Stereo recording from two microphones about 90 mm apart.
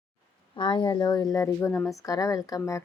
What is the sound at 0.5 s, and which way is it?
A woman's voice, 60° left (ahead or behind).